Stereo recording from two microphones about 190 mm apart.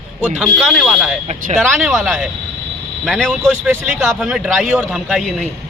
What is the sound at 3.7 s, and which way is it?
A man's voice, 10° right (ahead or behind).